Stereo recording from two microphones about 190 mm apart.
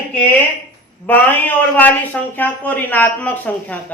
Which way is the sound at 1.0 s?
10° left (ahead or behind).